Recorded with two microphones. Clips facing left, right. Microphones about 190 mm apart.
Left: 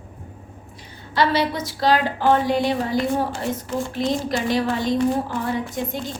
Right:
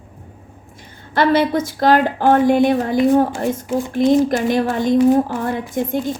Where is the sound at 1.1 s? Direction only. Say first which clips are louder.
Right 5 dB; 50° right (ahead or behind).